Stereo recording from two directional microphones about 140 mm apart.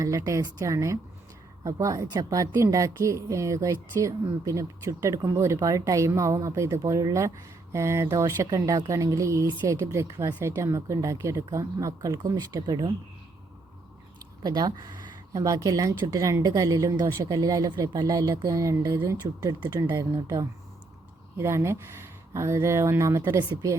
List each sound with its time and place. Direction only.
0.0 s a woman's voice: 25° right (ahead or behind)
14.4 s a woman's voice: 30° right (ahead or behind)
19.5 s speech: 10° right (ahead or behind)
19.9 s a woman's voice: 25° right (ahead or behind)